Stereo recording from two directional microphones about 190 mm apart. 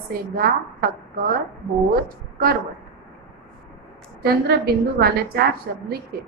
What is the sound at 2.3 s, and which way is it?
Speech, 50° right (ahead or behind).